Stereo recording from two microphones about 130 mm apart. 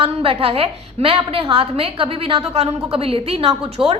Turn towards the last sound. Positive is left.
turn(degrees=-45)  # may be behind; listen again after turning